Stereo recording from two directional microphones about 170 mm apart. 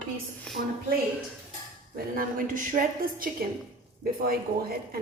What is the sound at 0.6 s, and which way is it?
Speech, 60° right (ahead or behind).